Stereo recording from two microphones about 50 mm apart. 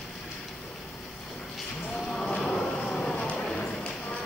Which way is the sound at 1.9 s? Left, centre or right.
Centre.